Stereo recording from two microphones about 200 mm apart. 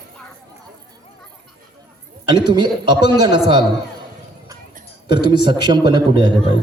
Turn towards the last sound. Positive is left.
turn(degrees=-20)  # may be behind; listen again after turning